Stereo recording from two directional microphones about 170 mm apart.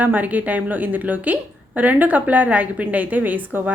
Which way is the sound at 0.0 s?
10° right (ahead or behind).